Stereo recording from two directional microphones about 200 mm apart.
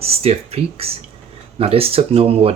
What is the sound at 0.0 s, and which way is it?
Speech, 30° right (ahead or behind).